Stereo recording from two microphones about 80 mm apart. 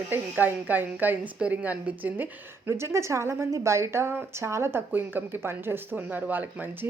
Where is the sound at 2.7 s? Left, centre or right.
Right.